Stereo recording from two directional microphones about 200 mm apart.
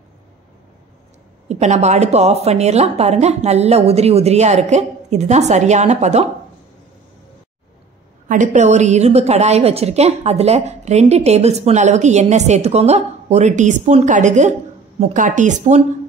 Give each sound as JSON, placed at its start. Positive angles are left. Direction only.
{"t": 1.5, "sound": "a woman's voice", "side_deg": -35}
{"t": 8.3, "sound": "a woman's voice", "side_deg": -35}